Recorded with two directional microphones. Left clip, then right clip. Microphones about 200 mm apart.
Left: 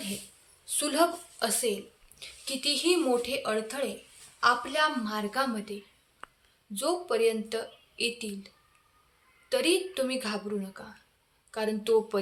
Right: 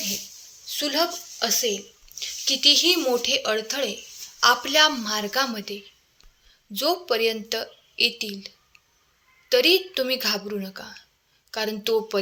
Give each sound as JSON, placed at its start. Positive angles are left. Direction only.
{"t": 0.6, "sound": "speech", "side_deg": -10}
{"t": 4.4, "sound": "a woman's voice", "side_deg": -35}